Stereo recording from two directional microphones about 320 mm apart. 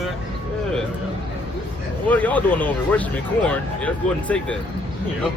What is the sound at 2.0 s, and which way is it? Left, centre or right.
Speech, centre.